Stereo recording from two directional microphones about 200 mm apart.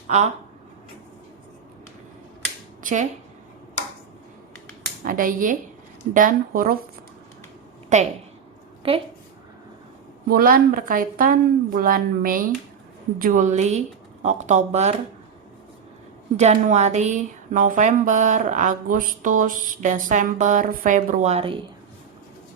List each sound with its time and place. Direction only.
0.1 s speech: 35° right (ahead or behind)
2.8 s speech: 40° right (ahead or behind)
5.0 s a woman's voice: 45° right (ahead or behind)
8.8 s a woman's voice: 25° right (ahead or behind)
10.2 s a woman's voice: 45° right (ahead or behind)
16.4 s speech: 35° right (ahead or behind)